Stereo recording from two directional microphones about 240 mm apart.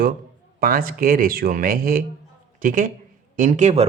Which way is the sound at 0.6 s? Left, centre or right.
Right.